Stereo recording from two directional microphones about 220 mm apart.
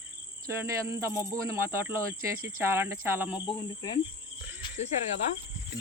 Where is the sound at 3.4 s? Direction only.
20° left (ahead or behind).